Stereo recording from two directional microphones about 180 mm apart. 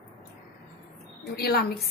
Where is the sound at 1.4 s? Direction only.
60° left (ahead or behind).